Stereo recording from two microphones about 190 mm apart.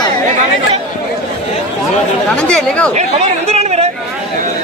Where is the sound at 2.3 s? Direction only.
5° left (ahead or behind).